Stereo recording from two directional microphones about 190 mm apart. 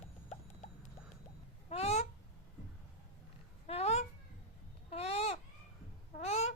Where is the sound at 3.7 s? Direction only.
35° left (ahead or behind).